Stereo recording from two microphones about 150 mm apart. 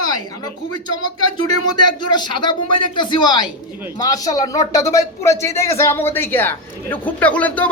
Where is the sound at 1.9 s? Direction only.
30° left (ahead or behind).